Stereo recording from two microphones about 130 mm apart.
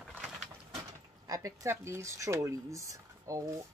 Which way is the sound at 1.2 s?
25° right (ahead or behind).